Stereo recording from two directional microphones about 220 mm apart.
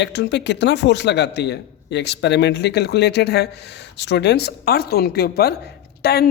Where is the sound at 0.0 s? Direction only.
55° left (ahead or behind).